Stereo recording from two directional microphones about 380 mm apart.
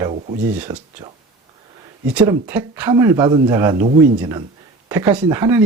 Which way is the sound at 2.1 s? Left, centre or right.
Centre.